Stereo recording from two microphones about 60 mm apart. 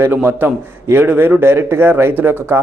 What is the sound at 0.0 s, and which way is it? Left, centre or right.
A man's voice, right.